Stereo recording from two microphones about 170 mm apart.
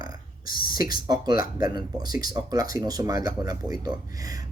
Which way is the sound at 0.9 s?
25° right (ahead or behind).